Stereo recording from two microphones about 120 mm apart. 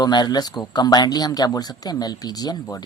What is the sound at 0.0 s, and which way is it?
Speech, 35° left (ahead or behind).